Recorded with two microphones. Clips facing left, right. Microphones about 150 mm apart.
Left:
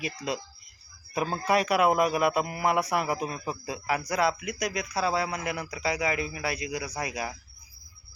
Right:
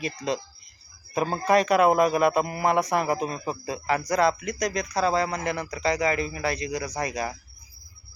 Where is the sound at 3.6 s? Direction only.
10° left (ahead or behind).